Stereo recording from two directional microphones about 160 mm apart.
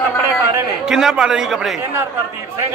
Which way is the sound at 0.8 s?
5° right (ahead or behind).